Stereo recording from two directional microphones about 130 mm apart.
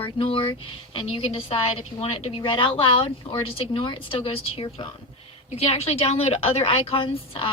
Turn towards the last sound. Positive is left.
turn(degrees=45)  # may be behind; listen again after turning